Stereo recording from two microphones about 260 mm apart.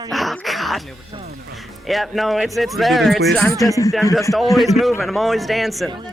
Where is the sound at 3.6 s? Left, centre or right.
Centre.